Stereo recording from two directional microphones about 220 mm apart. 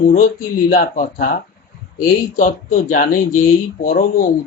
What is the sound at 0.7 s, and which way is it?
Speech, 40° left (ahead or behind).